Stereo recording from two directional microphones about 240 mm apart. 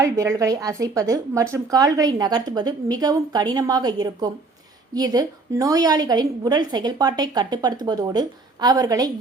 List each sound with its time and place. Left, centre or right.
0.0 s a woman's voice: centre